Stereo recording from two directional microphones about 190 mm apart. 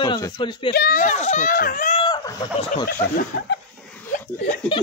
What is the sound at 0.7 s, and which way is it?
A child's voice, 50° left (ahead or behind).